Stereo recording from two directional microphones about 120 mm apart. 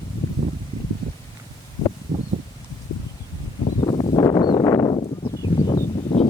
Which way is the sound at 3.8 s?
40° left (ahead or behind).